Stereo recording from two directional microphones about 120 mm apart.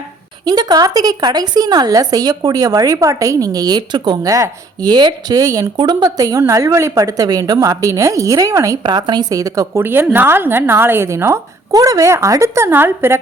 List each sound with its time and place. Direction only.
0.4 s speech: 35° right (ahead or behind)
9.8 s a woman's voice: 15° right (ahead or behind)